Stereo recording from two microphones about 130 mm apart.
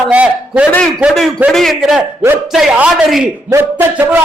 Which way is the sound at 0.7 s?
10° left (ahead or behind).